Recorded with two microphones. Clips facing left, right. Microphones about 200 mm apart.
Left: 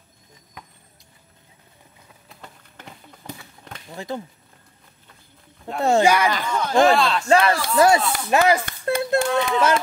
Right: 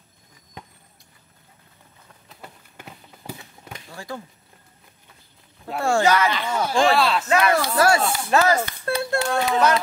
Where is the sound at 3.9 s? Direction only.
20° left (ahead or behind).